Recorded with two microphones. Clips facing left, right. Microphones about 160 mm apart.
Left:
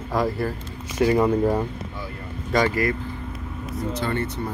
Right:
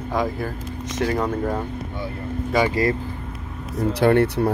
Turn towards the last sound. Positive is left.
turn(degrees=-70)  # may be behind; listen again after turning